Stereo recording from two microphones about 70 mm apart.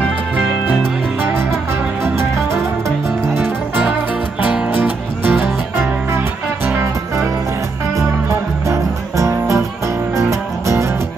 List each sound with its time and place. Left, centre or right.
3.3 s music: right
8.6 s music: right